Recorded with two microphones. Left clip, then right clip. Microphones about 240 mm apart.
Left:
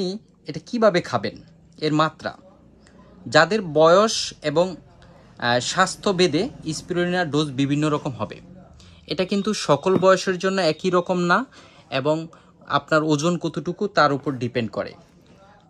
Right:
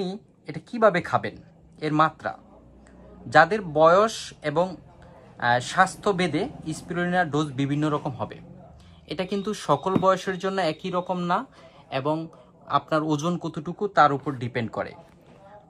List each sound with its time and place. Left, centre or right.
0.0 s speech: centre